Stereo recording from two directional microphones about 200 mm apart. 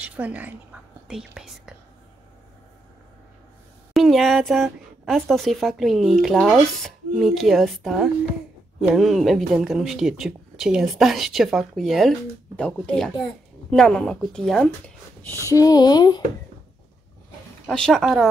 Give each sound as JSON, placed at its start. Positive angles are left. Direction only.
{"t": 0.0, "sound": "speech", "side_deg": -5}
{"t": 3.9, "sound": "speech", "side_deg": 0}
{"t": 15.4, "sound": "speech", "side_deg": 15}
{"t": 17.6, "sound": "speech", "side_deg": 0}